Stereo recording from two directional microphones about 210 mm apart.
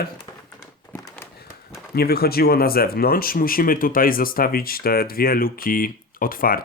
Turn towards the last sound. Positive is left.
turn(degrees=45)  # may be behind; listen again after turning